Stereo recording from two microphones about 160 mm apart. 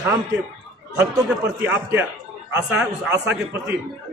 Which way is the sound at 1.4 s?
15° right (ahead or behind).